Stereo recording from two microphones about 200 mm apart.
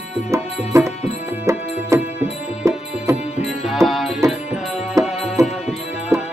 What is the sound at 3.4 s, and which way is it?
Music, centre (ahead or behind).